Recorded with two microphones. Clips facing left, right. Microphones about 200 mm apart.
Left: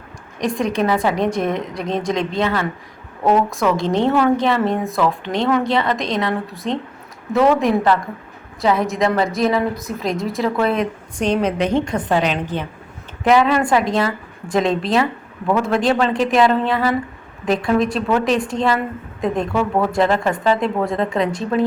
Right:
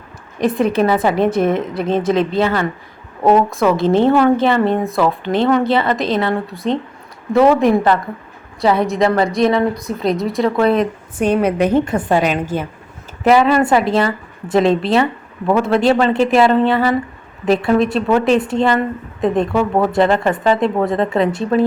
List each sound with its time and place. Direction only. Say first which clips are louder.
0.3 s a woman's voice: right 5 dB; 5° right (ahead or behind)
19.5 s speech: right 3 dB; 20° right (ahead or behind)
20.0 s a woman's voice: right 3 dB; centre (ahead or behind)